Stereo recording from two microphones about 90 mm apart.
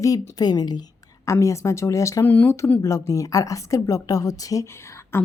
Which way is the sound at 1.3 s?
35° left (ahead or behind).